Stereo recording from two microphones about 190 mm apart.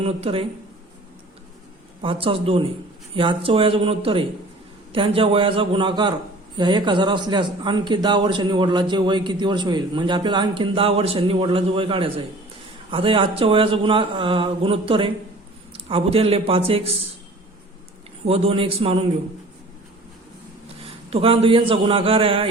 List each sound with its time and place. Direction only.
0.0 s a man's voice: 30° right (ahead or behind)
2.0 s a man's voice: 30° right (ahead or behind)
18.3 s a man's voice: 30° right (ahead or behind)
21.1 s a man's voice: 30° right (ahead or behind)